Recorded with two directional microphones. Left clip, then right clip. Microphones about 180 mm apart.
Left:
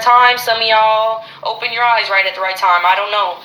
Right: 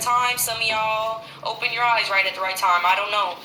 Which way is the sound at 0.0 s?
55° left (ahead or behind).